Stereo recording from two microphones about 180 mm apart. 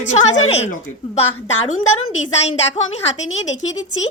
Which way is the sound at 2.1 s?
35° left (ahead or behind).